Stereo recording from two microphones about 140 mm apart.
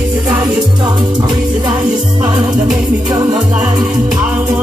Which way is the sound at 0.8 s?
30° right (ahead or behind).